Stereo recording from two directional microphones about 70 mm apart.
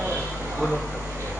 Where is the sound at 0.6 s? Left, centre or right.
Centre.